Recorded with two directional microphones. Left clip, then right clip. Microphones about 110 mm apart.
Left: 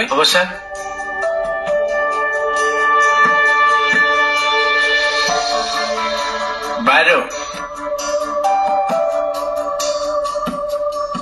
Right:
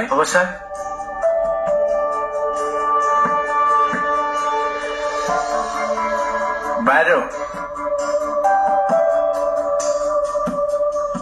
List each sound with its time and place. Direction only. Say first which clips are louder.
0.1 s speech: left 2 dB; 15° left (ahead or behind)
2.6 s music: left 6 dB; 25° left (ahead or behind)
6.8 s music: left 3 dB; 30° left (ahead or behind)
8.5 s music: even; 20° left (ahead or behind)